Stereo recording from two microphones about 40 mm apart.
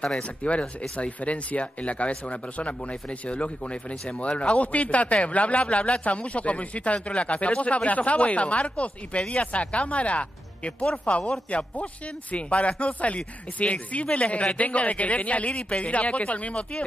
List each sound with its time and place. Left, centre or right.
0.0 s speech: left